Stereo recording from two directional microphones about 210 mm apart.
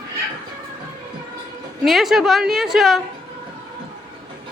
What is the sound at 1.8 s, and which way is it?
A woman's voice, centre (ahead or behind).